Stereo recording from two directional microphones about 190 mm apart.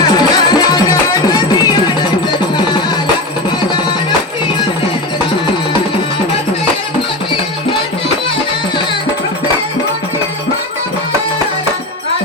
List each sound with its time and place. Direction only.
0.6 s music: 20° left (ahead or behind)